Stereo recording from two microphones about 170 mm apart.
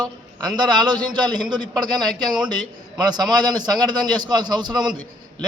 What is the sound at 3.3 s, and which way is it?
A man's voice, 25° right (ahead or behind).